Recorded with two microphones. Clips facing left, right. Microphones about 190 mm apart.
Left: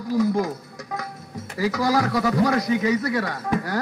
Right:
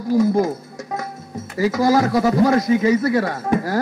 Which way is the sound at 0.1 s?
25° right (ahead or behind).